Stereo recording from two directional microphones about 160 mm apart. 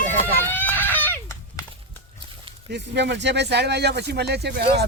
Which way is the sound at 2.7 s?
90° right.